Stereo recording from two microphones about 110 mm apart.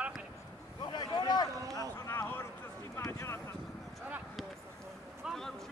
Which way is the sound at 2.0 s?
25° left (ahead or behind).